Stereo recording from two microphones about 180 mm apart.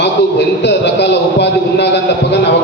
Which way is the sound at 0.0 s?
70° left (ahead or behind).